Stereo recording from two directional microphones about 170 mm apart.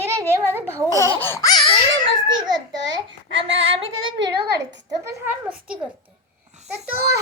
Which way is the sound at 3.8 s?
30° right (ahead or behind).